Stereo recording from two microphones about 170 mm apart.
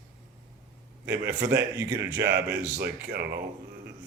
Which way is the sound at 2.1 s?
70° right (ahead or behind).